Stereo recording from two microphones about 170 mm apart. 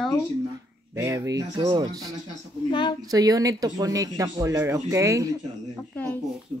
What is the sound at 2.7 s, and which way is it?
Speech, 25° left (ahead or behind).